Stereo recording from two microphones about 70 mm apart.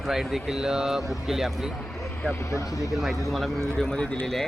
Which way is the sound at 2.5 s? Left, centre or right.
Left.